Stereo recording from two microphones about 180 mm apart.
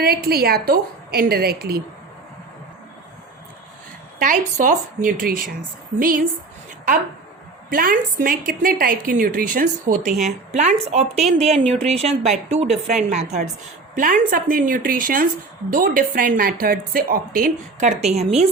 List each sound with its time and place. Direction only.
0.0 s a woman's voice: 60° right (ahead or behind)
4.2 s a woman's voice: 45° right (ahead or behind)